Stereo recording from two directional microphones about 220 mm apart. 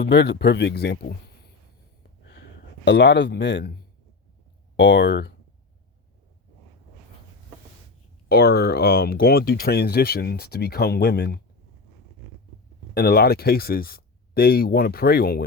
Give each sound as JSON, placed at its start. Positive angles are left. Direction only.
{"t": 0.0, "sound": "speech", "side_deg": 50}
{"t": 2.8, "sound": "speech", "side_deg": 50}
{"t": 4.8, "sound": "speech", "side_deg": 55}
{"t": 8.3, "sound": "speech", "side_deg": 45}
{"t": 12.9, "sound": "speech", "side_deg": 45}